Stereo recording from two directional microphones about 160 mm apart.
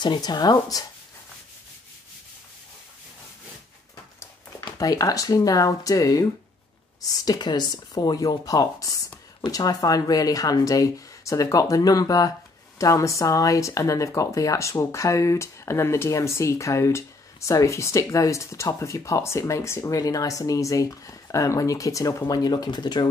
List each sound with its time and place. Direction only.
0.0 s speech: 25° left (ahead or behind)
3.9 s speech: 20° left (ahead or behind)